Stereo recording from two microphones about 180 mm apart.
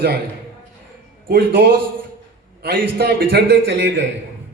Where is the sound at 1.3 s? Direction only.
55° right (ahead or behind).